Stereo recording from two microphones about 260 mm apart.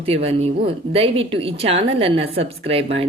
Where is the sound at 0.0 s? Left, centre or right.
Right.